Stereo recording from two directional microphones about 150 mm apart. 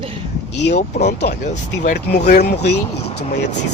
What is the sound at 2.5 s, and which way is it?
Speech, 90° left.